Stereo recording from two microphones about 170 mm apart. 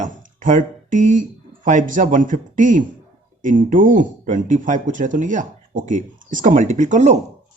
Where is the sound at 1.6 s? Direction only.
50° right (ahead or behind).